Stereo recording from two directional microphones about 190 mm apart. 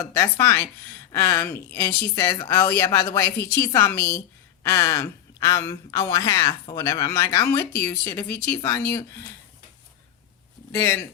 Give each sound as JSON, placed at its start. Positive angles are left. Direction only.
{"t": 0.1, "sound": "speech", "side_deg": 15}
{"t": 3.9, "sound": "a woman's voice", "side_deg": 60}
{"t": 4.6, "sound": "speech", "side_deg": 15}
{"t": 10.7, "sound": "speech", "side_deg": 15}